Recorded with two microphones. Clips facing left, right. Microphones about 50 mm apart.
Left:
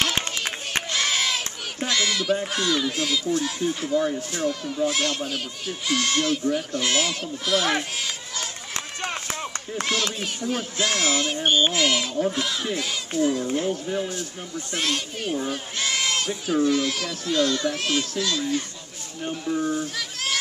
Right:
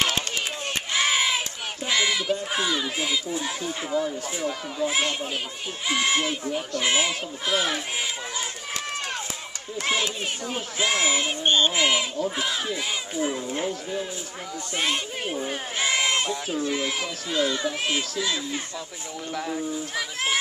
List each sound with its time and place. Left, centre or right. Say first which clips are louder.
0.9 s crowd: right 3 dB; centre
1.9 s a sound: even; centre
2.5 s a child's voice: left 2 dB; centre
9.8 s a sound: right 1 dB; centre
10.5 s a child's voice: even; centre
14.8 s a child's voice: right 1 dB; centre
15.8 s bleat: right 2 dB; centre
16.4 s a child's voice: left 5 dB; centre
20.0 s a sound: right 2 dB; centre